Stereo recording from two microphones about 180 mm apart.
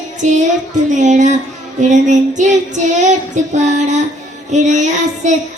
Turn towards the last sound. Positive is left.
turn(degrees=-40)  # may be behind; listen again after turning